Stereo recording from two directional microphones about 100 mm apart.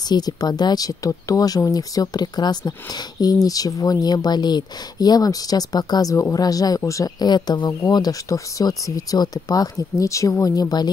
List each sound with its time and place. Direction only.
0.1 s speech: 40° left (ahead or behind)
7.2 s speech: 45° left (ahead or behind)